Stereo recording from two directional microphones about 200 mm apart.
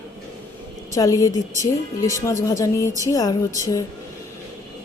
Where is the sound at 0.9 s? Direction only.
15° left (ahead or behind).